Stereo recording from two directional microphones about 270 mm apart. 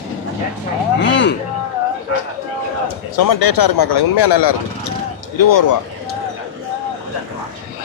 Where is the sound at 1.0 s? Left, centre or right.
Left.